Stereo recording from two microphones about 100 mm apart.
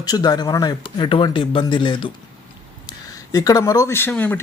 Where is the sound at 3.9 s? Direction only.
20° left (ahead or behind).